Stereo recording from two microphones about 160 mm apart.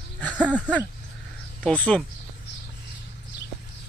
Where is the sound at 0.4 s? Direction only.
5° right (ahead or behind).